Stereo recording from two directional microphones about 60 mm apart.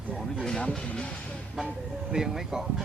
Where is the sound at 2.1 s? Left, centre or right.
Centre.